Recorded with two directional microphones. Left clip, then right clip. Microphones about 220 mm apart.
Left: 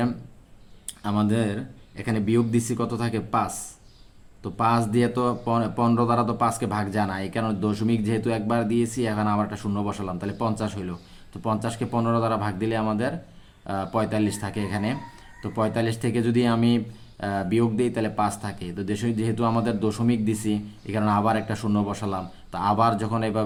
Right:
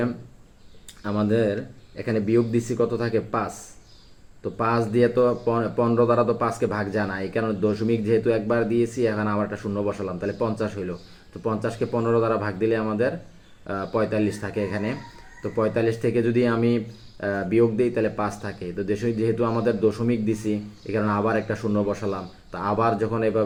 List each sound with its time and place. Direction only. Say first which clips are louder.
1.0 s speech: right 3 dB; 45° left (ahead or behind)
4.5 s speech: even; 45° left (ahead or behind)